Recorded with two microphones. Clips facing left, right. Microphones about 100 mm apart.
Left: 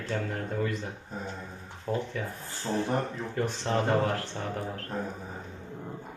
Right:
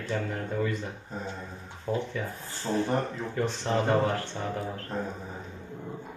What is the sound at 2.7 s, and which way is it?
Speech, centre (ahead or behind).